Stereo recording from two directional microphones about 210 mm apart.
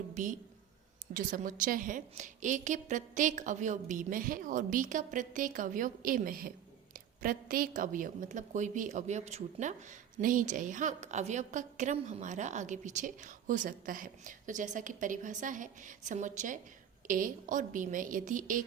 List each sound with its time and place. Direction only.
0.1 s a woman's voice: 40° right (ahead or behind)